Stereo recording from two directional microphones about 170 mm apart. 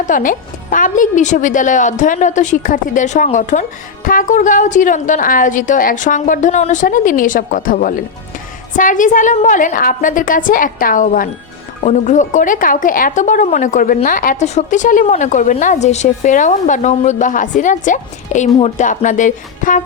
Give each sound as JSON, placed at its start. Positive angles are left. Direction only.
{"t": 0.0, "sound": "speech", "side_deg": 50}